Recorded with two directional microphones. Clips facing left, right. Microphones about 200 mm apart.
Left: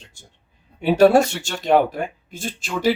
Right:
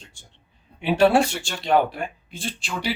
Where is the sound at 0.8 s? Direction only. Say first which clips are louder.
Left 4 dB; 40° left (ahead or behind).